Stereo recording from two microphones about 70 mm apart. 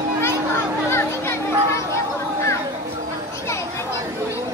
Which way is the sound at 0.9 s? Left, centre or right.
Left.